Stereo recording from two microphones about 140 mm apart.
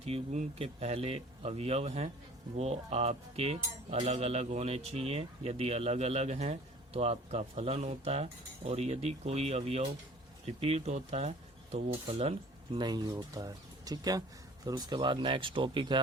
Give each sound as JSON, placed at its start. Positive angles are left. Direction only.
{"t": 0.0, "sound": "speech", "side_deg": -55}
{"t": 12.0, "sound": "speech", "side_deg": -40}